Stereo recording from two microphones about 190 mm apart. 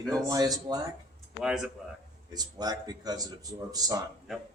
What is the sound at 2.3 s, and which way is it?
A man's voice, 20° right (ahead or behind).